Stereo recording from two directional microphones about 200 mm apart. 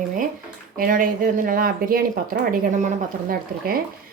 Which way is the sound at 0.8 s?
45° right (ahead or behind).